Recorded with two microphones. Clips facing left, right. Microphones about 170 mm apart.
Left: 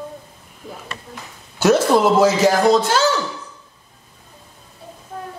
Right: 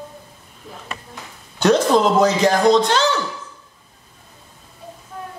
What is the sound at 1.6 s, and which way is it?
Speech, 5° left (ahead or behind).